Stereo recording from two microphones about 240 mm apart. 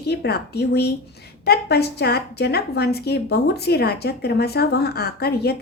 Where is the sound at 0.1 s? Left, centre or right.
Left.